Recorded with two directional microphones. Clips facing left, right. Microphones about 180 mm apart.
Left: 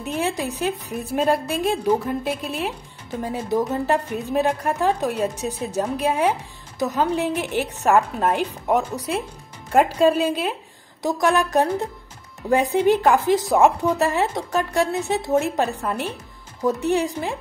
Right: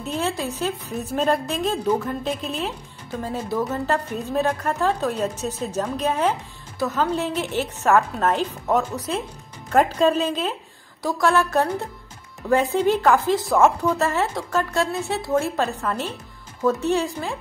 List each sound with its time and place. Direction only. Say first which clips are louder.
0.0 s speech: left 1 dB; 15° left (ahead or behind)